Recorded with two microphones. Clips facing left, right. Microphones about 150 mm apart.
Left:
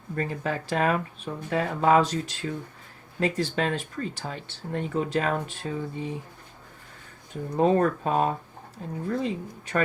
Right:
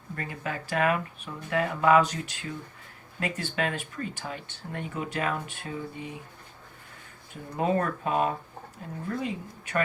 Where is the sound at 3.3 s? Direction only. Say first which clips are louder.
Left 4 dB; 35° left (ahead or behind).